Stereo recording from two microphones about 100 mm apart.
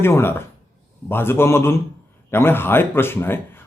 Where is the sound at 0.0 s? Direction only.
25° left (ahead or behind).